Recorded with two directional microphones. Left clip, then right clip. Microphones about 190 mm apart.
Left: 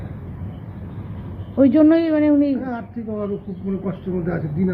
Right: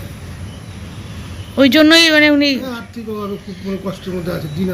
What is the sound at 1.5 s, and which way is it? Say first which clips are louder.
A woman's voice: right 5 dB; 20° right (ahead or behind).